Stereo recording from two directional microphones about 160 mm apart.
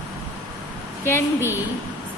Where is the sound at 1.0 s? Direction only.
15° left (ahead or behind).